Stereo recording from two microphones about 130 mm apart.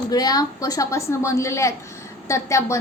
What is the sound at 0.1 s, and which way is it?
A woman's voice, 30° left (ahead or behind).